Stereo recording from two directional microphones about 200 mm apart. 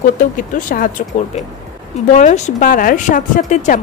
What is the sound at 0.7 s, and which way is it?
A woman's voice, 45° left (ahead or behind).